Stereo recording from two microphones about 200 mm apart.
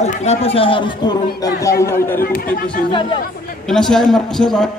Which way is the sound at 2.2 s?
50° left (ahead or behind).